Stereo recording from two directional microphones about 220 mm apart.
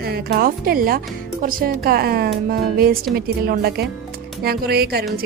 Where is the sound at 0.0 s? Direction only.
45° right (ahead or behind).